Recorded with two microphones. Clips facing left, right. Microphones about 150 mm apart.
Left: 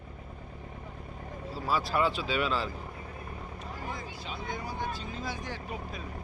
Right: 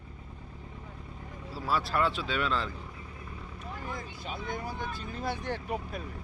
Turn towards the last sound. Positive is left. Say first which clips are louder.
# right 4 dB
turn(degrees=-60)  # may be behind; listen again after turning